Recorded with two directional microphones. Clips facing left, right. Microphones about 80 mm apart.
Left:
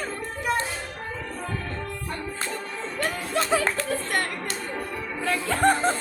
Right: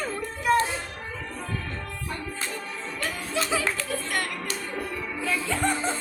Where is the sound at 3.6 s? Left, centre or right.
Left.